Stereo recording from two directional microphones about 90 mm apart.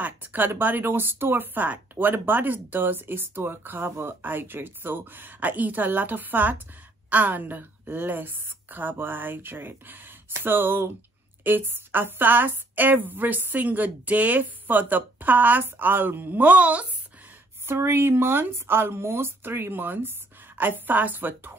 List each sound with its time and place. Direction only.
0.0 s speech: 20° right (ahead or behind)
17.6 s speech: 25° right (ahead or behind)